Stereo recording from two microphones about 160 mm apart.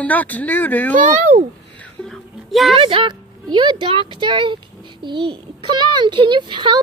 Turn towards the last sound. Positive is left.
turn(degrees=-30)  # may be behind; listen again after turning